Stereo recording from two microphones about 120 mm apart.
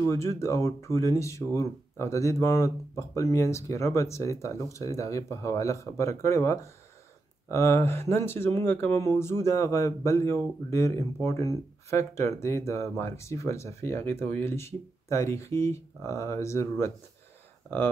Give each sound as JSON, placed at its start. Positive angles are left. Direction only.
{"t": 0.0, "sound": "speech", "side_deg": 25}